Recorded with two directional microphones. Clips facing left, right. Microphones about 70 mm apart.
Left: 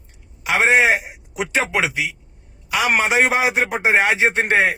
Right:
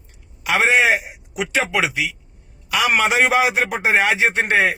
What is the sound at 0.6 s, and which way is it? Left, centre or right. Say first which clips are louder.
Speech: left 2 dB; left.